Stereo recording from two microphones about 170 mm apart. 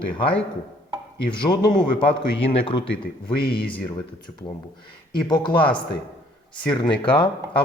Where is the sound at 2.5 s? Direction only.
30° left (ahead or behind).